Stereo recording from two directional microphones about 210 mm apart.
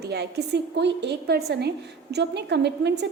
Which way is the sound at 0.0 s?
50° right (ahead or behind).